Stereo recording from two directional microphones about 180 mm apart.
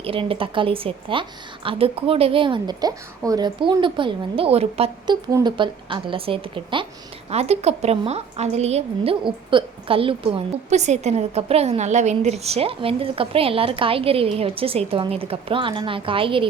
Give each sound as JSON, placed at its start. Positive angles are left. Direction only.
{"t": 0.0, "sound": "a woman's voice", "side_deg": -30}